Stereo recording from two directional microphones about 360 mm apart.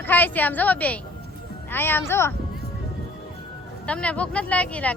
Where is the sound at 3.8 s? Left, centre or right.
Centre.